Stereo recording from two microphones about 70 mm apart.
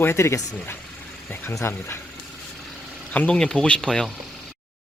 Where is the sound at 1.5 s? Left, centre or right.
Left.